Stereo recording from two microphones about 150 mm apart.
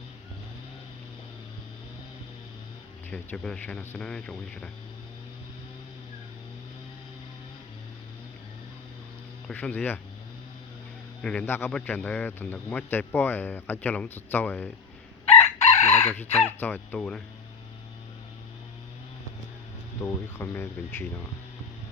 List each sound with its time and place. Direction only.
3.1 s a man's voice: 5° left (ahead or behind)
9.5 s a man's voice: 10° left (ahead or behind)
11.2 s a man's voice: 5° left (ahead or behind)
15.3 s chicken: 45° left (ahead or behind)
16.2 s speech: 45° left (ahead or behind)
16.5 s a man's voice: 15° left (ahead or behind)
20.0 s a man's voice: 15° left (ahead or behind)